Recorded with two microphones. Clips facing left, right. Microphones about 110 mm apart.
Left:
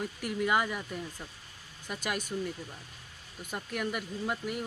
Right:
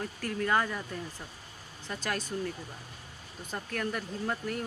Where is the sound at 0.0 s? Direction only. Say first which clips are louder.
Left 1 dB; 15° left (ahead or behind).